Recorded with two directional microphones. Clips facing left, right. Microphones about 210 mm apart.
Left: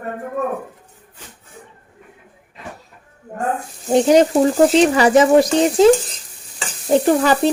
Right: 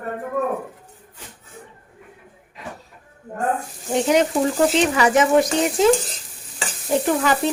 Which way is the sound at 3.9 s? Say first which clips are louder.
Left 6 dB; 35° left (ahead or behind).